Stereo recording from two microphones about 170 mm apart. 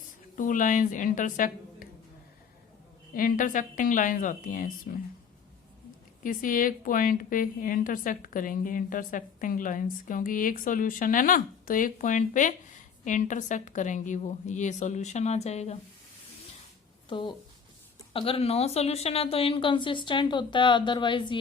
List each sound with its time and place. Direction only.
0.3 s a woman's voice: 50° left (ahead or behind)
3.2 s a woman's voice: 55° left (ahead or behind)
6.2 s a woman's voice: 50° left (ahead or behind)
17.1 s a woman's voice: 30° left (ahead or behind)